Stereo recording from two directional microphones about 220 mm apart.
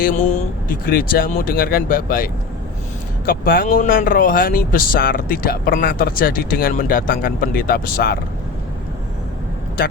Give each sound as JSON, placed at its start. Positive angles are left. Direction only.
{"t": 0.0, "sound": "speech", "side_deg": 35}